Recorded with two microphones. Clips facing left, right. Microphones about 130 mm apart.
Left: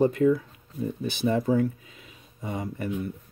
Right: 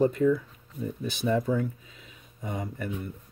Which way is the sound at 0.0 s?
65° left (ahead or behind).